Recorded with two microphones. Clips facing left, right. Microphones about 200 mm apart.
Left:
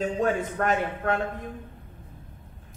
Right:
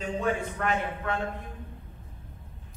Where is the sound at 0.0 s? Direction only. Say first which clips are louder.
Left 4 dB; 40° left (ahead or behind).